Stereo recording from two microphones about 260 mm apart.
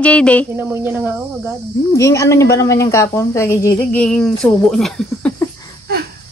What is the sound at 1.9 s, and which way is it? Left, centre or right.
A woman's voice, centre.